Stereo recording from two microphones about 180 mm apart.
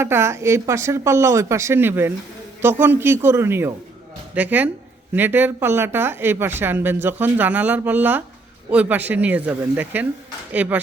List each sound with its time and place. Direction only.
0.0 s speech: 15° right (ahead or behind)